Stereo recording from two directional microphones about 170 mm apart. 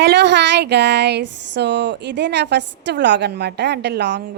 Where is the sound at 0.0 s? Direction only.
90° right.